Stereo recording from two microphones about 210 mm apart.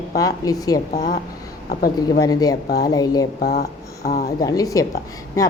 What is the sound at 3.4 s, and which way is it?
Speech, 50° left (ahead or behind).